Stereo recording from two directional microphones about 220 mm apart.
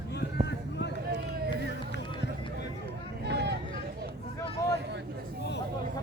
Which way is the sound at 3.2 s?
50° right (ahead or behind).